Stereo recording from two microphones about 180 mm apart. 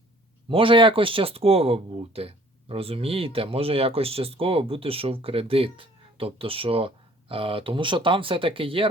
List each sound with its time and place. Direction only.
0.4 s speech: 30° right (ahead or behind)